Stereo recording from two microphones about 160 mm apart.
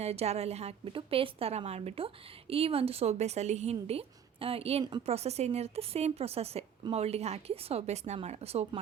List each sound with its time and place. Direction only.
0.0 s a woman's voice: 40° right (ahead or behind)
5.0 s a woman's voice: 40° right (ahead or behind)